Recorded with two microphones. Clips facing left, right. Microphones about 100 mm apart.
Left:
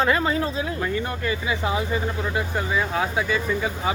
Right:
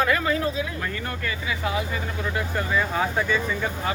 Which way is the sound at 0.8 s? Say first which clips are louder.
Left 4 dB; 20° left (ahead or behind).